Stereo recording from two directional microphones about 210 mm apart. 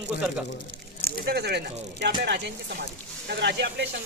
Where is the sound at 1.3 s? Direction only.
50° right (ahead or behind).